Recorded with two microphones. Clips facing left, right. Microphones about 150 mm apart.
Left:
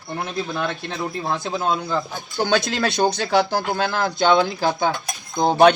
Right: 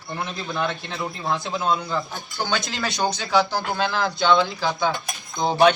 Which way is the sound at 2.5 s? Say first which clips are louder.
Left 7 dB; 65° left (ahead or behind).